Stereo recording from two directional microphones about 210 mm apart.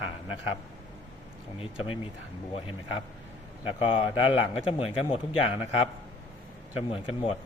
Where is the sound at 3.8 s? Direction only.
25° left (ahead or behind).